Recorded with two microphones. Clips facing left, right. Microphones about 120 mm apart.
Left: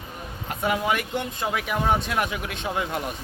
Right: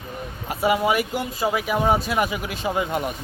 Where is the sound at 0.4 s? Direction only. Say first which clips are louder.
Right 4 dB; 5° right (ahead or behind).